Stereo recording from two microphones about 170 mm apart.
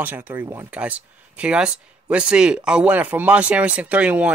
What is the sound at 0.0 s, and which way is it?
Speech, 10° right (ahead or behind).